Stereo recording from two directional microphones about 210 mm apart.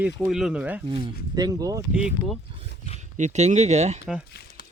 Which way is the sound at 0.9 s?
20° right (ahead or behind).